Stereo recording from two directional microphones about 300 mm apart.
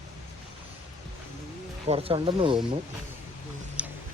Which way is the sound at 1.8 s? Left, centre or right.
Centre.